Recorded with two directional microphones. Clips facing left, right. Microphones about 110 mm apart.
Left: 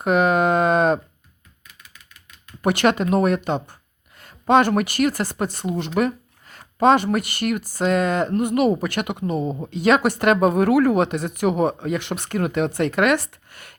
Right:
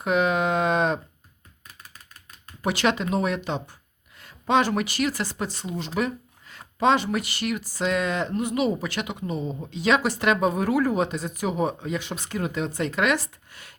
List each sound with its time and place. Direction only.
0.0 s speech: 50° left (ahead or behind)
1.6 s typewriter: 40° right (ahead or behind)
2.6 s speech: 55° left (ahead or behind)